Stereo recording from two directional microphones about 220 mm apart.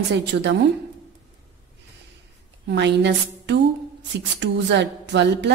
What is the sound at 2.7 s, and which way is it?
A woman's voice, 50° right (ahead or behind).